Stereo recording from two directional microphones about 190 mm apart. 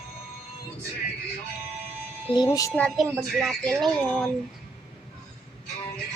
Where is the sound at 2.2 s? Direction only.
25° left (ahead or behind); by 4.2 s centre (ahead or behind).